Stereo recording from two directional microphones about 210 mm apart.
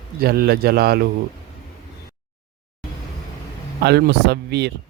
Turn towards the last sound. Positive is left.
turn(degrees=-50)  # may be behind; listen again after turning